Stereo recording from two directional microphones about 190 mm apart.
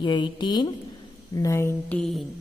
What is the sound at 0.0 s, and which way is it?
A woman's voice, 25° left (ahead or behind).